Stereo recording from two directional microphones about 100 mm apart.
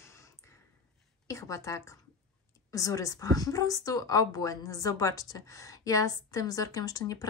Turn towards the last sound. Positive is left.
turn(degrees=35)  # may be behind; listen again after turning